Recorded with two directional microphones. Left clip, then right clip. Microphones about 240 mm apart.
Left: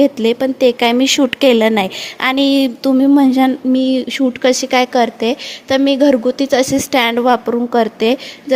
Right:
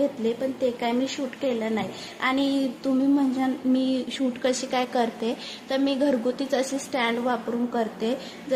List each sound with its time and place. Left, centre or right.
0.0 s a woman's voice: left